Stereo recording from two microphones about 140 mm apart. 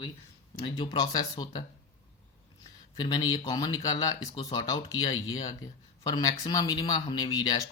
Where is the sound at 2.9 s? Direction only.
30° left (ahead or behind).